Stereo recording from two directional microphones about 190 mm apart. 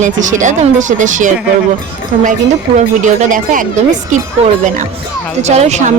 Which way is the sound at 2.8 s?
40° right (ahead or behind).